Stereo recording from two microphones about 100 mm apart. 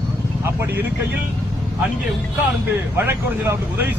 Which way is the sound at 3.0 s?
25° right (ahead or behind).